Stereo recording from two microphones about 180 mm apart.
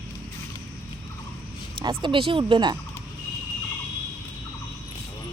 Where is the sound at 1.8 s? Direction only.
25° right (ahead or behind).